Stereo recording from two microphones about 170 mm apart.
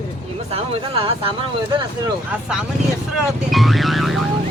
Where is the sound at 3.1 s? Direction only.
Centre (ahead or behind).